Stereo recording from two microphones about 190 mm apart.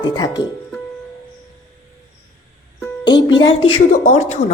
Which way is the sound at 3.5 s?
30° left (ahead or behind).